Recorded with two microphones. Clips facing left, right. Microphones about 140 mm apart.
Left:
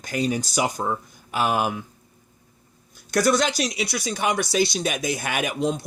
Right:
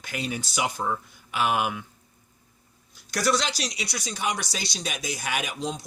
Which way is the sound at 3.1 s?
50° left (ahead or behind).